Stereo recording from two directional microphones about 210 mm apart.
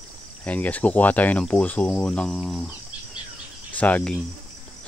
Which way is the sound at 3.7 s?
5° left (ahead or behind).